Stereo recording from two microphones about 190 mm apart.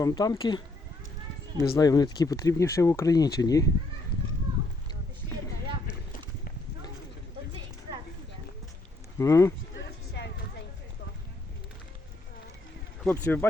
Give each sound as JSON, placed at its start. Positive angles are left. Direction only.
{"t": 0.0, "sound": "speech", "side_deg": 20}
{"t": 1.7, "sound": "speech", "side_deg": 20}
{"t": 9.1, "sound": "speech", "side_deg": 15}
{"t": 9.8, "sound": "vehicle", "side_deg": 65}
{"t": 13.1, "sound": "speech", "side_deg": 10}